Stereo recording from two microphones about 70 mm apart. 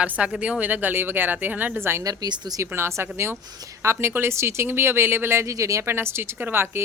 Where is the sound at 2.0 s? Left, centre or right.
Right.